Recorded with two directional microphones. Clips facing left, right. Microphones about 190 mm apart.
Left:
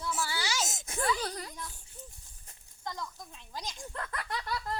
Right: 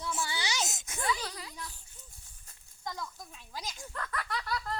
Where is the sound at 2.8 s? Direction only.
5° right (ahead or behind).